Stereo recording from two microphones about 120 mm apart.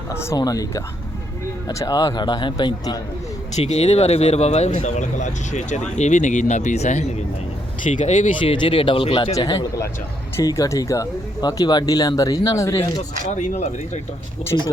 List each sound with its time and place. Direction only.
0.1 s speech: 20° left (ahead or behind)
3.5 s speech: 60° left (ahead or behind)
7.9 s speech: 90° left
8.4 s speech: 45° left (ahead or behind)
9.3 s speech: 35° left (ahead or behind)
13.2 s speech: 85° left
14.5 s speech: 40° left (ahead or behind)